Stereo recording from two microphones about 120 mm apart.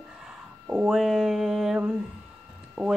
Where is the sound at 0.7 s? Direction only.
10° right (ahead or behind).